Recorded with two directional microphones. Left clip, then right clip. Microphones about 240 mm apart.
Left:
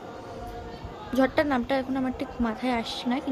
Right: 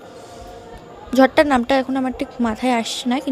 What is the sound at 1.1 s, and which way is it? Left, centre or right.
A woman's voice, right.